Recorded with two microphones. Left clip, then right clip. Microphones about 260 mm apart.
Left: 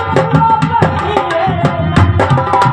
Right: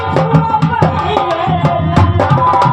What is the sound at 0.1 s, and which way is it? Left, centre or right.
Music, left.